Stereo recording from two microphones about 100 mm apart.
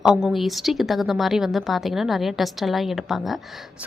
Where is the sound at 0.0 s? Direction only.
5° right (ahead or behind).